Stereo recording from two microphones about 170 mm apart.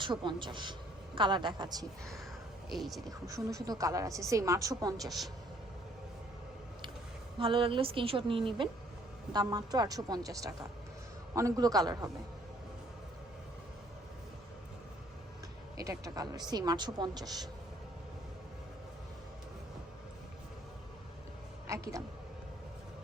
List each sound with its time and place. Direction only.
0.0 s a woman's voice: 30° right (ahead or behind)
2.7 s a woman's voice: centre (ahead or behind)
3.1 s a woman's voice: 20° right (ahead or behind)
5.0 s a woman's voice: centre (ahead or behind)
7.3 s a woman's voice: 30° right (ahead or behind)
15.8 s a woman's voice: 20° right (ahead or behind)
21.7 s a sound: 20° right (ahead or behind)